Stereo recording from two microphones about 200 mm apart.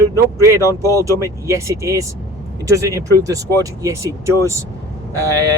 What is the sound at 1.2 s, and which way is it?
Speech, 15° right (ahead or behind).